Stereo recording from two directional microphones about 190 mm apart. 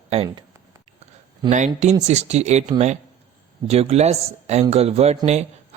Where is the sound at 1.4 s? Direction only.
40° right (ahead or behind).